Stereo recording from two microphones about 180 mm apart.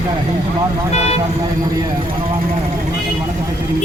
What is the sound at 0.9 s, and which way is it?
Speech, 35° left (ahead or behind).